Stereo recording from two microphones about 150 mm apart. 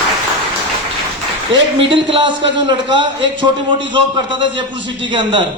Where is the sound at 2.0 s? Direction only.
35° right (ahead or behind).